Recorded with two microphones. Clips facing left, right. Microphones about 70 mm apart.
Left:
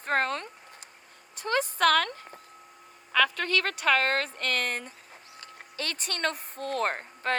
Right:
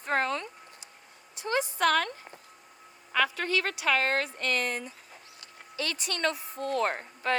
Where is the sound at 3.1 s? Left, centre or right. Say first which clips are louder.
Left 2 dB; left.